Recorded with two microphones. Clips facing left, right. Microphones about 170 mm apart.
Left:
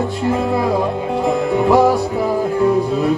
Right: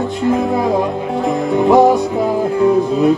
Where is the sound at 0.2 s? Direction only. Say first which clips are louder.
Right 4 dB; 20° right (ahead or behind).